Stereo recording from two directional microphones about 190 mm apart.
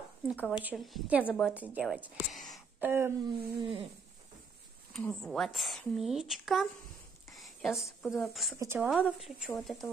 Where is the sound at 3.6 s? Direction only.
30° right (ahead or behind).